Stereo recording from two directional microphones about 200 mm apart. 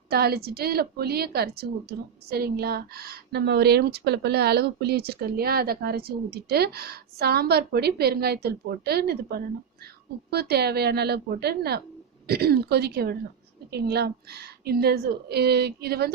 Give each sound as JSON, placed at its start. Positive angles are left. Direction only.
{"t": 0.1, "sound": "a woman's voice", "side_deg": -50}